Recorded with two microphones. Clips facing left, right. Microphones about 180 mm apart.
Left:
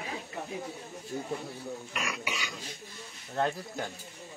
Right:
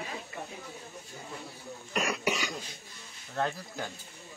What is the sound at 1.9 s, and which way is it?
Speech, 40° right (ahead or behind).